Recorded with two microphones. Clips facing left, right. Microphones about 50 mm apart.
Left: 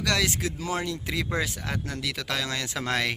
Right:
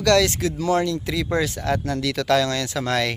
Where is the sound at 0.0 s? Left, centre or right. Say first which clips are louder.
Right 8 dB; centre.